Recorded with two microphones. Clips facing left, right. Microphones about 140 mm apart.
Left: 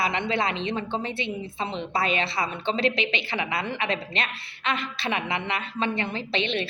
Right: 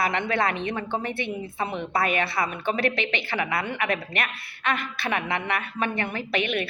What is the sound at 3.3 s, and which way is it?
Speech, 50° right (ahead or behind).